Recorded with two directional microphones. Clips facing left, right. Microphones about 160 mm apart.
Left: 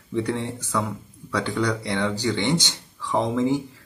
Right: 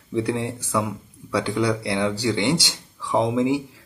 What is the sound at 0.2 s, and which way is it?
Speech, 10° right (ahead or behind).